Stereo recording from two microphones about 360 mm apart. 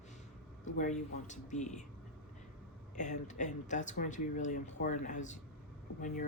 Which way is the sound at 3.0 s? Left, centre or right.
Centre.